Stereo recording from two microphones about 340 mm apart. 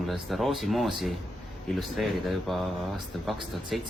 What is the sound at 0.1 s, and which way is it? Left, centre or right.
Speech, centre.